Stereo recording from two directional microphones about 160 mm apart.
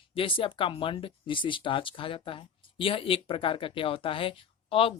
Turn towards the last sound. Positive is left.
turn(degrees=35)  # may be behind; listen again after turning